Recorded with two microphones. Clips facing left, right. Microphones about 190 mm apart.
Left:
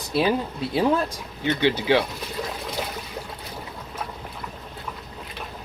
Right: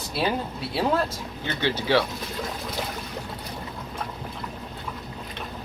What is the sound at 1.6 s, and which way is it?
Speech, 15° left (ahead or behind).